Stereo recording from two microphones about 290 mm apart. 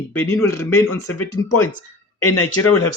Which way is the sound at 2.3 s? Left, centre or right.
Left.